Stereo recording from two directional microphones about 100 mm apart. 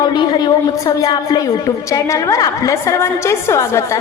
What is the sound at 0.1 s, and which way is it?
A woman's voice, 50° left (ahead or behind).